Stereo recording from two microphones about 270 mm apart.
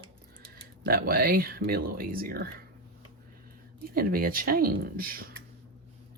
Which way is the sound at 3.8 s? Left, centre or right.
Right.